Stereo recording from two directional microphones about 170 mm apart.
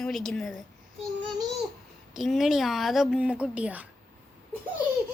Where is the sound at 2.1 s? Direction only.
Centre (ahead or behind).